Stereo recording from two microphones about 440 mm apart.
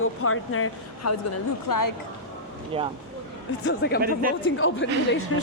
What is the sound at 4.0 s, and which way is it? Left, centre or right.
Speech, centre.